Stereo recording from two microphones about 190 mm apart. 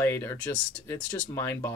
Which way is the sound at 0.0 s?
15° left (ahead or behind).